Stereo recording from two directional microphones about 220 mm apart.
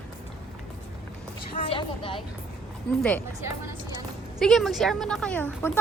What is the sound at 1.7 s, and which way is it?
Speech, 25° left (ahead or behind).